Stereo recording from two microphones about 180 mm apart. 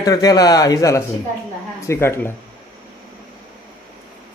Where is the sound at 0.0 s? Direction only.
20° left (ahead or behind).